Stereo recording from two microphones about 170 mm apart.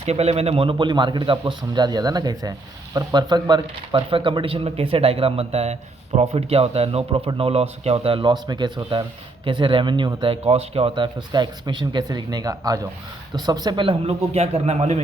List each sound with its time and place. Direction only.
0.0 s speech: 40° right (ahead or behind)